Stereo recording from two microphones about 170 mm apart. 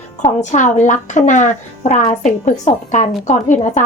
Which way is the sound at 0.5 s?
45° left (ahead or behind).